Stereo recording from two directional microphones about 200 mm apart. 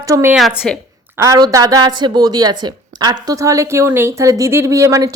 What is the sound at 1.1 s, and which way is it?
Speech, 15° right (ahead or behind).